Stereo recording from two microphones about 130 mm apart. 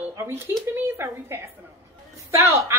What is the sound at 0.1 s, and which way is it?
A woman's voice, 20° right (ahead or behind).